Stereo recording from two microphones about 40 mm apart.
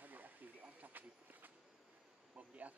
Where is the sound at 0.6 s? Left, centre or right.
Right.